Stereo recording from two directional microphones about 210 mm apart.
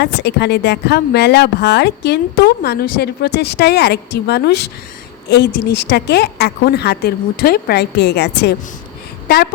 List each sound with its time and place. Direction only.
0.0 s a woman's voice: 55° left (ahead or behind)